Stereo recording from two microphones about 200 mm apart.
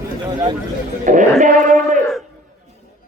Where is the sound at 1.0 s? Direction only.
40° right (ahead or behind).